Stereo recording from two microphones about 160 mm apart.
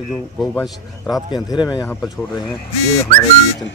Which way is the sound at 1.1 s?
25° left (ahead or behind).